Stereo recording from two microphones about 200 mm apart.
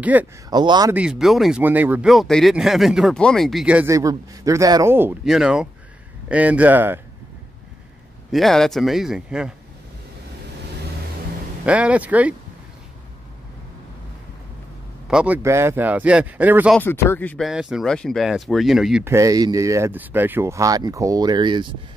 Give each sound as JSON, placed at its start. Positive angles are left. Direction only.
{"t": 0.0, "sound": "speech", "side_deg": -10}
{"t": 0.5, "sound": "speech", "side_deg": -20}
{"t": 0.9, "sound": "speech", "side_deg": -5}
{"t": 8.3, "sound": "speech", "side_deg": 0}
{"t": 11.6, "sound": "speech", "side_deg": -5}
{"t": 15.0, "sound": "speech", "side_deg": -5}
{"t": 16.7, "sound": "speech", "side_deg": 10}
{"t": 17.5, "sound": "speech", "side_deg": 0}
{"t": 19.0, "sound": "speech", "side_deg": -15}